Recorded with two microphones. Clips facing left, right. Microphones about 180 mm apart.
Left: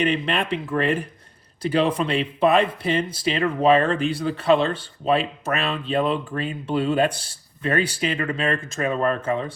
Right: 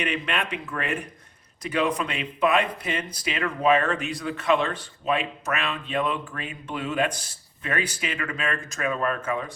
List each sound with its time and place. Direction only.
0.0 s speech: 30° left (ahead or behind)